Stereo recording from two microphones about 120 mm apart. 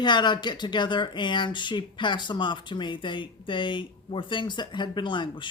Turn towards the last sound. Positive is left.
turn(degrees=40)  # may be behind; listen again after turning